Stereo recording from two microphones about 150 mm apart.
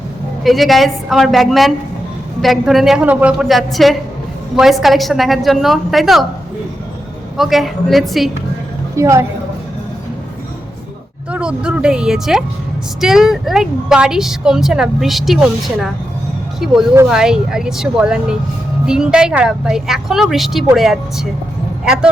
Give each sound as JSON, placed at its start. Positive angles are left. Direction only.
{"t": 0.4, "sound": "speech", "side_deg": 0}
{"t": 7.3, "sound": "speech", "side_deg": 0}
{"t": 9.0, "sound": "a woman's voice", "side_deg": -20}
{"t": 11.3, "sound": "speech", "side_deg": -5}
{"t": 17.1, "sound": "speech", "side_deg": -5}